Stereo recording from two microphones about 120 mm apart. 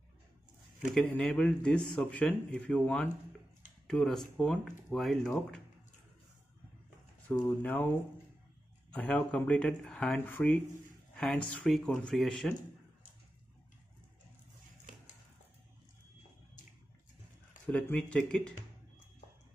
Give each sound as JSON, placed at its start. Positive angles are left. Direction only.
{"t": 0.9, "sound": "speech", "side_deg": 5}
{"t": 7.4, "sound": "speech", "side_deg": 15}
{"t": 8.9, "sound": "speech", "side_deg": 10}
{"t": 10.1, "sound": "speech", "side_deg": 15}
{"t": 18.1, "sound": "speech", "side_deg": 10}